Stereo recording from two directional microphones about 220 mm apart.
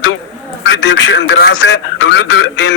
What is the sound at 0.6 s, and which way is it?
A man's voice, 55° left (ahead or behind).